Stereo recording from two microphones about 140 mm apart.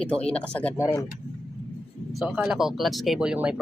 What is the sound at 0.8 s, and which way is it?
Speech, 25° left (ahead or behind).